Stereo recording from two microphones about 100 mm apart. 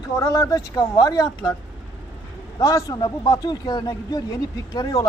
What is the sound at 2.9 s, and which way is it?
Speech, 45° left (ahead or behind).